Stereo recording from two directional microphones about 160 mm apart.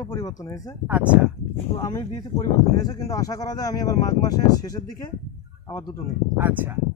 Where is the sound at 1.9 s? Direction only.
20° left (ahead or behind).